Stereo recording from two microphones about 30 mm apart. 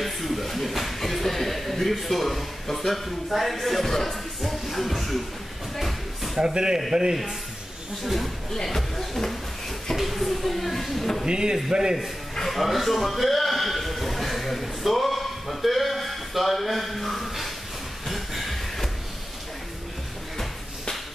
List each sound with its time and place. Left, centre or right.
0.0 s speech: centre
5.8 s a sound: centre
6.4 s speech: right
8.0 s speech: centre
11.2 s speech: right
12.4 s a man's voice: centre
18.0 s a sound: centre